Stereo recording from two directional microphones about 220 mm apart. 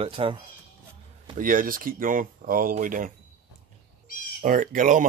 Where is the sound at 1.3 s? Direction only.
40° right (ahead or behind).